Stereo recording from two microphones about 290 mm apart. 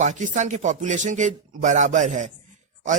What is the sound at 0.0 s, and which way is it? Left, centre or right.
Speech, right.